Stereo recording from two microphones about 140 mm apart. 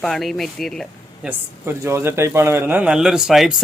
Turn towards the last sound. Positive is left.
turn(degrees=-5)  # may be behind; listen again after turning